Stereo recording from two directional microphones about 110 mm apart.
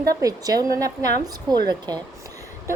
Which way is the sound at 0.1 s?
30° right (ahead or behind).